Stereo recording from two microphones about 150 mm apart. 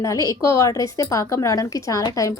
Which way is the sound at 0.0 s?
20° left (ahead or behind).